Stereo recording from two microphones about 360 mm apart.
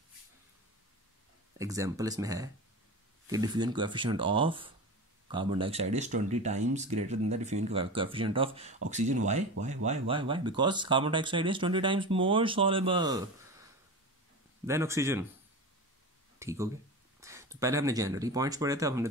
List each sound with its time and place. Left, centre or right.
1.6 s speech: centre
14.7 s speech: centre
16.3 s speech: centre